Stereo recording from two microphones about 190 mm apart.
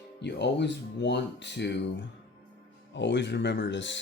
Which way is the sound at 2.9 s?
70° left (ahead or behind).